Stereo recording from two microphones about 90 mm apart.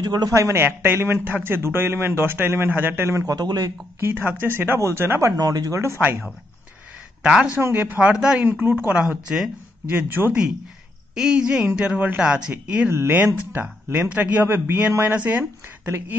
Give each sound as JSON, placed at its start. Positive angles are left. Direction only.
{"t": 0.0, "sound": "a man's voice", "side_deg": -50}
{"t": 0.3, "sound": "a man's voice", "side_deg": -35}
{"t": 3.1, "sound": "a man's voice", "side_deg": -40}
{"t": 4.0, "sound": "a man's voice", "side_deg": -20}
{"t": 5.3, "sound": "a man's voice", "side_deg": -45}
{"t": 7.2, "sound": "a man's voice", "side_deg": -10}
{"t": 11.1, "sound": "a man's voice", "side_deg": -10}